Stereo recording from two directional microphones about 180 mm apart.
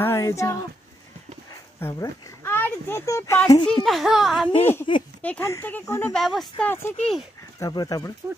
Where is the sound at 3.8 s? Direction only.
Centre (ahead or behind).